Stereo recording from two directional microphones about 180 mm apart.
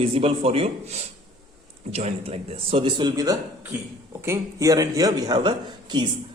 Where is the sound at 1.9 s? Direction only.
35° right (ahead or behind).